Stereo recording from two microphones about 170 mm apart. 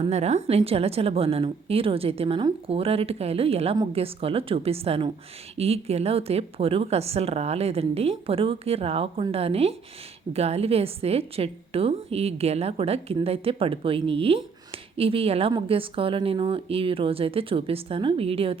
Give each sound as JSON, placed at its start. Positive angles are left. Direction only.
{"t": 0.0, "sound": "speech", "side_deg": -40}